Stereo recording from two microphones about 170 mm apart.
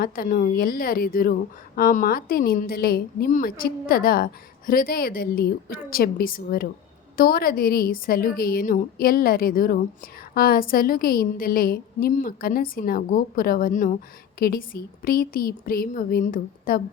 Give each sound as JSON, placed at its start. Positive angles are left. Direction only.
{"t": 0.0, "sound": "a woman's voice", "side_deg": 55}